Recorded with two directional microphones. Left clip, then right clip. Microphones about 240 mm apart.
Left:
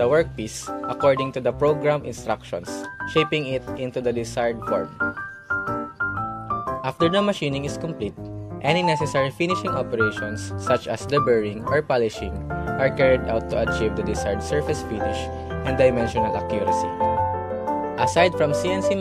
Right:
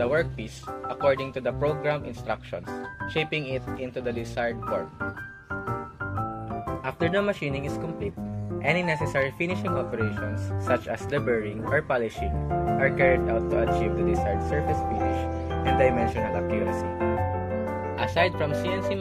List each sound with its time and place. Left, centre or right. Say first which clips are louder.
0.0 s speech: left 6 dB; left
6.8 s speech: left 4 dB; left
17.9 s speech: left 6 dB; left